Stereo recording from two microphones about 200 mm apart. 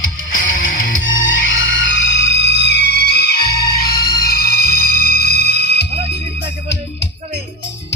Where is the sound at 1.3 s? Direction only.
70° left (ahead or behind).